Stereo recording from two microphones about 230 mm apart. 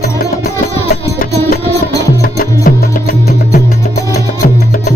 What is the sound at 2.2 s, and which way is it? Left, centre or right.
Music, left.